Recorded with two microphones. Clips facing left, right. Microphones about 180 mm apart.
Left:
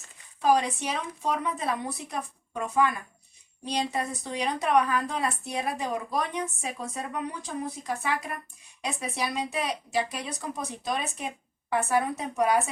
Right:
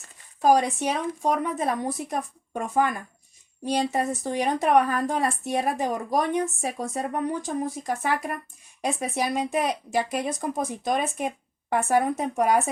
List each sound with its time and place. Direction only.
0.4 s speech: 45° right (ahead or behind)